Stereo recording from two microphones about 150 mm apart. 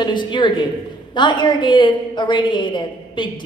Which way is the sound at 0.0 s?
30° left (ahead or behind).